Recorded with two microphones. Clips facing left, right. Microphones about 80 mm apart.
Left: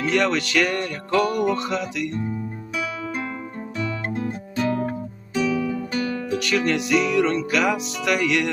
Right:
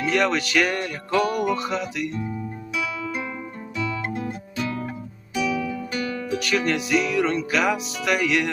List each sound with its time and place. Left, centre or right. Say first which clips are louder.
0.0 s music: left 1 dB; centre
3.8 s music: even; left
6.3 s music: left 1 dB; centre